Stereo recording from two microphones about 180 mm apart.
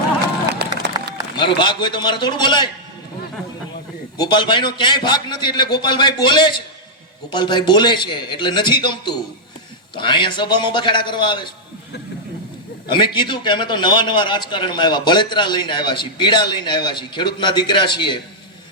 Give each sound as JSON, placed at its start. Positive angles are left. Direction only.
{"t": 1.4, "sound": "a man's voice", "side_deg": 25}
{"t": 4.2, "sound": "a man's voice", "side_deg": 25}
{"t": 12.9, "sound": "a man's voice", "side_deg": 25}